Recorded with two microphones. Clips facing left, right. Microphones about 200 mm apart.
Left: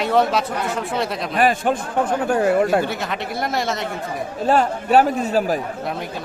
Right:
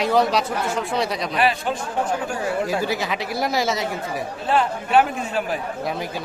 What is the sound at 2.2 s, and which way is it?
Speech, 55° left (ahead or behind).